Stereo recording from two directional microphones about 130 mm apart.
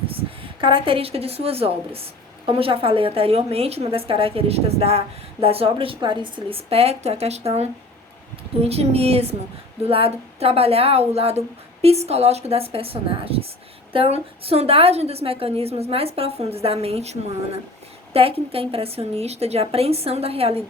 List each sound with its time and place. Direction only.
0.1 s a woman's voice: 45° right (ahead or behind)